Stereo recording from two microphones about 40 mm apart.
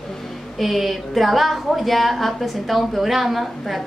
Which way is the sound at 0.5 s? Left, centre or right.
Centre.